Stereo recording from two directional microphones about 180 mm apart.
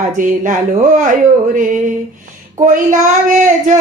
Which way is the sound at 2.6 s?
45° right (ahead or behind).